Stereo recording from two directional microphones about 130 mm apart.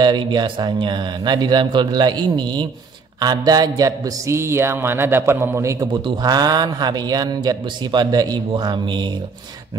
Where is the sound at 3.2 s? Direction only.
30° right (ahead or behind).